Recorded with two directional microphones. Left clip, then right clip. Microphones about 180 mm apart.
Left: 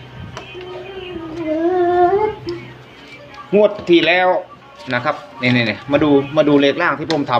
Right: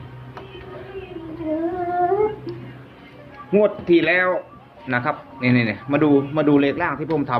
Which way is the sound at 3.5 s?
25° left (ahead or behind).